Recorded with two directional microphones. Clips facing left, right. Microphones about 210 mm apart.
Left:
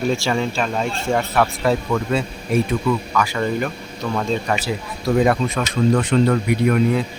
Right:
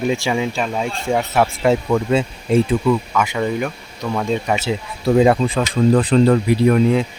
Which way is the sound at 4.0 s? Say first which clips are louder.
Right 1 dB; 15° right (ahead or behind).